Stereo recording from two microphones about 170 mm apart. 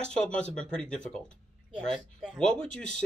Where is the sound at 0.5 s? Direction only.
5° left (ahead or behind).